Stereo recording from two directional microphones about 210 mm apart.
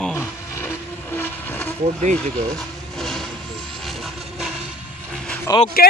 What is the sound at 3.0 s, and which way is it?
Vehicle, centre (ahead or behind).